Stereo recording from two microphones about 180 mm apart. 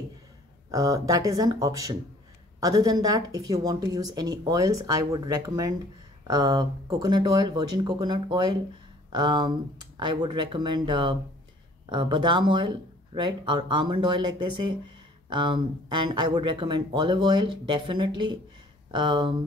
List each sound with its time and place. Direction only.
0.7 s speech: 20° right (ahead or behind)